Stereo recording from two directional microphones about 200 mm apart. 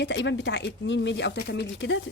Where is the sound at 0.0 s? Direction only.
65° left (ahead or behind).